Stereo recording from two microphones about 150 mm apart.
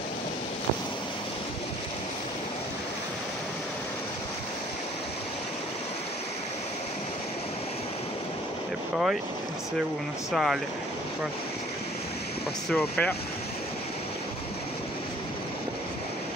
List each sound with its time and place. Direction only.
8.9 s speech: 5° right (ahead or behind)
10.3 s speech: centre (ahead or behind)
12.6 s speech: 5° left (ahead or behind)